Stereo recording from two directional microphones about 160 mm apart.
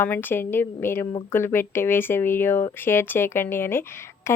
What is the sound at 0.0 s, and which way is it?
A woman's voice, 10° left (ahead or behind).